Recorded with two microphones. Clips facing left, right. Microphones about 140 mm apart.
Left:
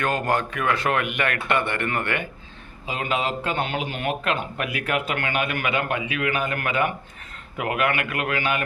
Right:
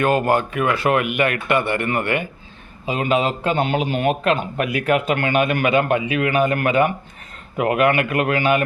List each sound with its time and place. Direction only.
0.0 s a man's voice: 10° right (ahead or behind); by 8.6 s 30° right (ahead or behind)